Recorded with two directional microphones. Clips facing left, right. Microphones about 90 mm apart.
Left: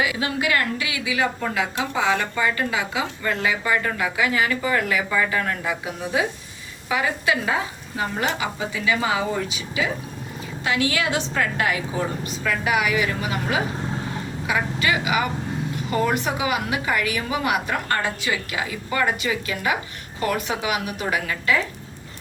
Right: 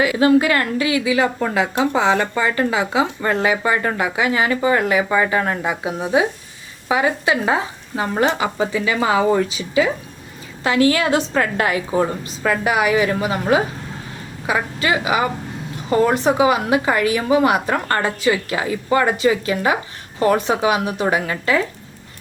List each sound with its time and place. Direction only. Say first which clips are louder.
0.0 s a woman's voice: right 9 dB; 40° right (ahead or behind)
9.0 s a woman's voice: right 7 dB; 50° right (ahead or behind); by 21.6 s 35° right (ahead or behind)